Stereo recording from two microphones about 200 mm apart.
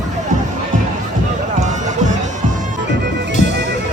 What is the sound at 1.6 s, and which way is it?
Music, 35° right (ahead or behind).